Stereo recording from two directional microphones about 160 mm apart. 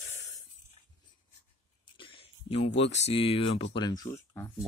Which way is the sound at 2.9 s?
40° left (ahead or behind).